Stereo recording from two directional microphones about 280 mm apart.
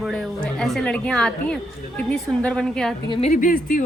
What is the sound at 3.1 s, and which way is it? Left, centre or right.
Speech, left.